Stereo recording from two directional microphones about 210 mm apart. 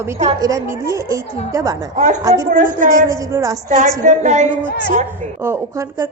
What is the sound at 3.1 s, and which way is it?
Speech, 15° right (ahead or behind).